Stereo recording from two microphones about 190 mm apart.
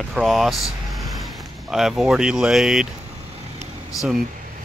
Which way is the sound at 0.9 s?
Centre (ahead or behind).